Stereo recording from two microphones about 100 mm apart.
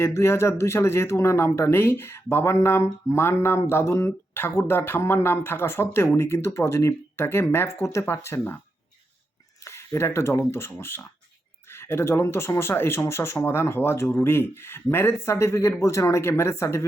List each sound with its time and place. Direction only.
0.0 s speech: 25° left (ahead or behind)
9.6 s speech: 25° left (ahead or behind)